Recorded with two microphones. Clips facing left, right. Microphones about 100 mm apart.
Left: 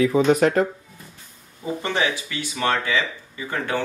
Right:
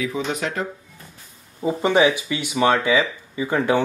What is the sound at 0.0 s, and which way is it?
Speech, 40° left (ahead or behind).